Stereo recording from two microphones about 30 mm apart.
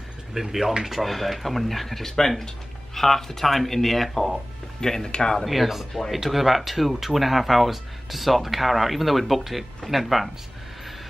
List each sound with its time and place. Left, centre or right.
0.3 s speech: centre
0.8 s speech: centre
5.4 s speech: centre